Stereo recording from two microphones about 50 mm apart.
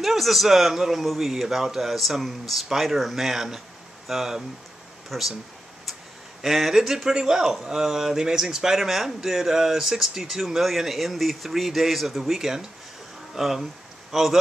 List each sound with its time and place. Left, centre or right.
0.0 s speech: centre
6.4 s a man's voice: centre